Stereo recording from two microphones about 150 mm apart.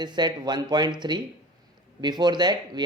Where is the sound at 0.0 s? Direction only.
30° right (ahead or behind).